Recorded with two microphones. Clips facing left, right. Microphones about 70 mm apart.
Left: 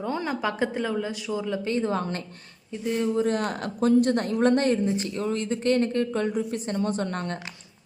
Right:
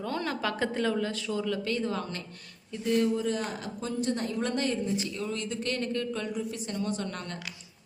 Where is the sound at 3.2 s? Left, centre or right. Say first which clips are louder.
Left 6 dB; left.